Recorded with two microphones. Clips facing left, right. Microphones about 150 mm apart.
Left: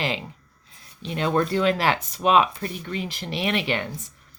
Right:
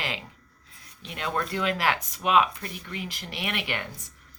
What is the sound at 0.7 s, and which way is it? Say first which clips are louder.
Speech: left 9 dB; 30° left (ahead or behind).